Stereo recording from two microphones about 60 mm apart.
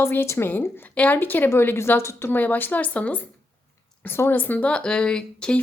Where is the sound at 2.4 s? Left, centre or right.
Left.